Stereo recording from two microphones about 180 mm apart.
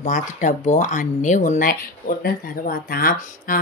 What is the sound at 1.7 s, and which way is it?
Speech, 60° left (ahead or behind).